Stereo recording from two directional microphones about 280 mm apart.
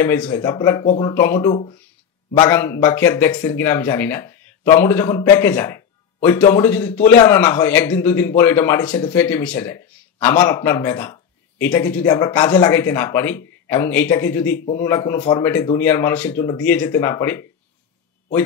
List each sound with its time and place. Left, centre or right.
0.0 s speech: centre
1.1 s speech: centre
1.5 s speech: left
2.3 s speech: centre